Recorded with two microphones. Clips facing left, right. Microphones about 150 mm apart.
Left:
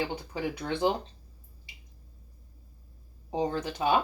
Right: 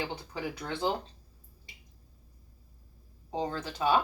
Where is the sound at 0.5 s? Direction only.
15° left (ahead or behind).